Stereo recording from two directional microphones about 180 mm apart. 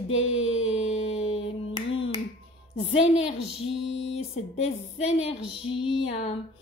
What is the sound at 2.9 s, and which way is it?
A woman's voice, 30° left (ahead or behind).